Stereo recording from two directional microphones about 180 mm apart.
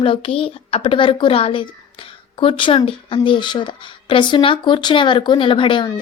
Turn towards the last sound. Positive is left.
turn(degrees=25)  # may be behind; listen again after turning